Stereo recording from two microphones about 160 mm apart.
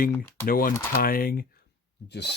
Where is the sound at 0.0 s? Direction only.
65° left (ahead or behind).